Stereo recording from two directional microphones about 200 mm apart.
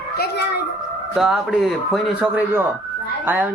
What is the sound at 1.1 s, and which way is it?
A man's voice, centre (ahead or behind).